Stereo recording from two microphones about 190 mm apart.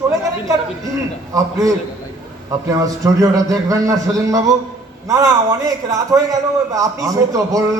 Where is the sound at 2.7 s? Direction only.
15° right (ahead or behind).